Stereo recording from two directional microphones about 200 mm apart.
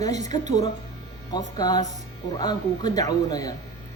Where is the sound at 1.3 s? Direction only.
20° left (ahead or behind).